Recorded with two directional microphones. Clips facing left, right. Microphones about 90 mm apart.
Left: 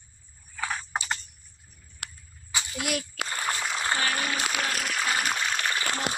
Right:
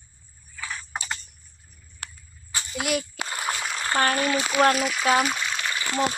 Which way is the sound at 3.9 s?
45° right (ahead or behind).